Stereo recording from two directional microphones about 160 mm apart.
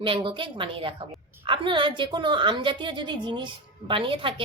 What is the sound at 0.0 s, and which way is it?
A woman's voice, 30° right (ahead or behind).